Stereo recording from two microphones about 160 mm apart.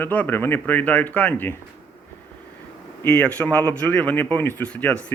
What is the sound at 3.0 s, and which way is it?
Speech, 10° left (ahead or behind).